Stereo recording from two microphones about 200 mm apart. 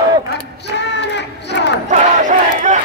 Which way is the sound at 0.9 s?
60° left (ahead or behind).